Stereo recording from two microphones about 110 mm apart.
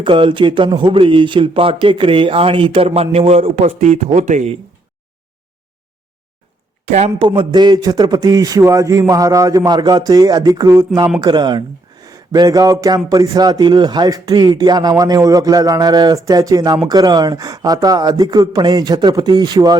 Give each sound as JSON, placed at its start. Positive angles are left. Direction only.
{"t": 0.0, "sound": "a man's voice", "side_deg": -50}
{"t": 6.8, "sound": "speech", "side_deg": -80}
{"t": 7.2, "sound": "a man's voice", "side_deg": -50}